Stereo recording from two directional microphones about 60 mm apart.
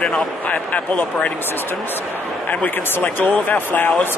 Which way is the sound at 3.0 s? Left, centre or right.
Left.